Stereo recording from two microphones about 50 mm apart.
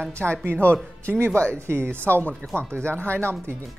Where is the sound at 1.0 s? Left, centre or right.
Right.